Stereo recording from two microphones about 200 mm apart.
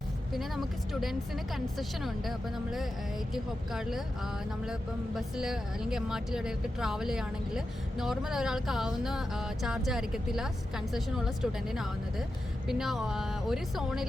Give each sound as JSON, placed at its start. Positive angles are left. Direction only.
{"t": 0.3, "sound": "speech", "side_deg": 0}
{"t": 3.3, "sound": "speech", "side_deg": 0}